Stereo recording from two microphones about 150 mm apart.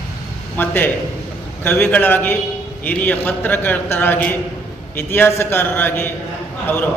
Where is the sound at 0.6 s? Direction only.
15° left (ahead or behind).